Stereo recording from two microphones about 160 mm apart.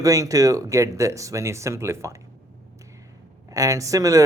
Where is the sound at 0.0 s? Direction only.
20° right (ahead or behind).